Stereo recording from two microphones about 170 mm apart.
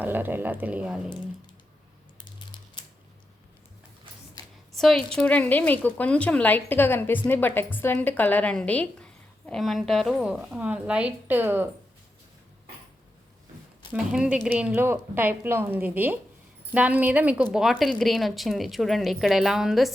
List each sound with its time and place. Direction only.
0.0 s a woman's voice: 10° right (ahead or behind)
4.7 s a woman's voice: centre (ahead or behind)
13.9 s a woman's voice: 5° right (ahead or behind)